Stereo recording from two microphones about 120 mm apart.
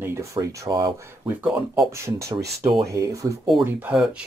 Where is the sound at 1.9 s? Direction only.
25° right (ahead or behind).